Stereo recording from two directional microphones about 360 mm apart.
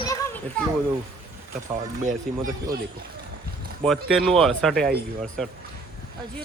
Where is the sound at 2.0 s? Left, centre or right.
Right.